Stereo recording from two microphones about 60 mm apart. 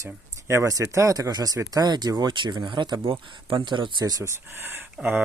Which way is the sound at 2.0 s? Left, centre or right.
Right.